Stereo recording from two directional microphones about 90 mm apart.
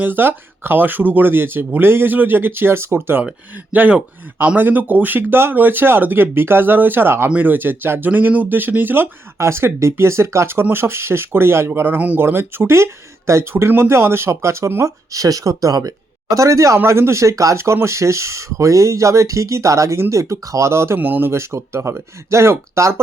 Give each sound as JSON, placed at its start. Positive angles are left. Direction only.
{"t": 0.0, "sound": "speech", "side_deg": -20}